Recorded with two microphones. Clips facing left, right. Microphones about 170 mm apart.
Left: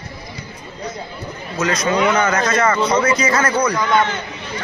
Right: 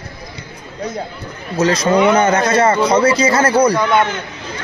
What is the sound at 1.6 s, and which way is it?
Speech, 30° right (ahead or behind).